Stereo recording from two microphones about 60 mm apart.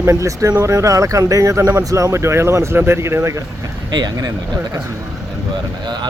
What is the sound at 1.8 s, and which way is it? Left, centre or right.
Speech, right.